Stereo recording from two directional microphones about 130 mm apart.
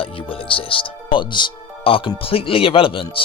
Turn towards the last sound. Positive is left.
turn(degrees=45)  # may be behind; listen again after turning